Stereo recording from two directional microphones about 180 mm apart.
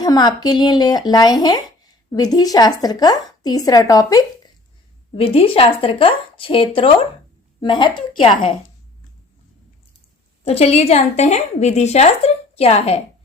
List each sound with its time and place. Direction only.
0.0 s a woman's voice: 20° left (ahead or behind)
5.1 s a woman's voice: 30° left (ahead or behind)
10.4 s a woman's voice: 35° left (ahead or behind)